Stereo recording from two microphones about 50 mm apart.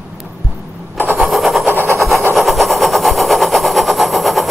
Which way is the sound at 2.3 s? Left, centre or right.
Centre.